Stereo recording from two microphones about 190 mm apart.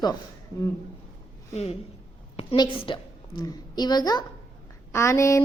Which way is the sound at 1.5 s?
35° left (ahead or behind).